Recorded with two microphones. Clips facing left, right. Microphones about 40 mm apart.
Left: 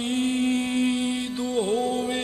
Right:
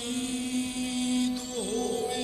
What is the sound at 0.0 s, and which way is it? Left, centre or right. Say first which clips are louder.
Music: left 8 dB; left.